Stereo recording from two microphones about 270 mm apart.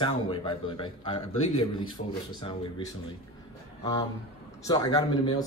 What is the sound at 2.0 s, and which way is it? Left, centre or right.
Speech, left.